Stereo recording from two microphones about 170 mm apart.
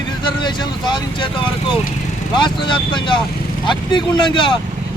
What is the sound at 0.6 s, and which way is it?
Speech, 25° left (ahead or behind).